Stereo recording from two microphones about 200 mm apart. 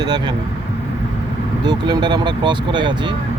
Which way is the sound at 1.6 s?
20° right (ahead or behind).